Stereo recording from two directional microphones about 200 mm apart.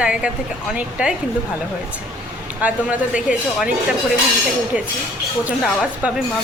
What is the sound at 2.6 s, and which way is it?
Speech, 5° right (ahead or behind).